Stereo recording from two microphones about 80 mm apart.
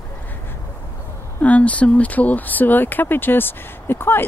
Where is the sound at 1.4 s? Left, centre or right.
Centre.